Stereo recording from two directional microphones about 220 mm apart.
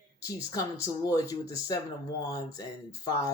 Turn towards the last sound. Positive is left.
turn(degrees=15)  # may be behind; listen again after turning